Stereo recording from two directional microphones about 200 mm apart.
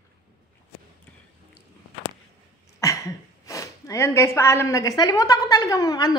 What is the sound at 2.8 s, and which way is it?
A woman's voice, 15° left (ahead or behind).